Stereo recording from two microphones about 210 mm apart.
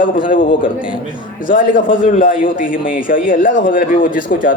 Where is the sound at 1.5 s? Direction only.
40° left (ahead or behind).